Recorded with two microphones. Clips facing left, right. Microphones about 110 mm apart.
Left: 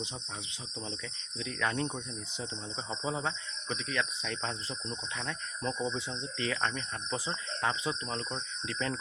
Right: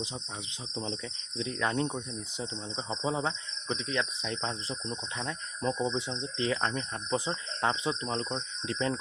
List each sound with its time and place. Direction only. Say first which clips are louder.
1.4 s cricket: right 3 dB; 25° right (ahead or behind)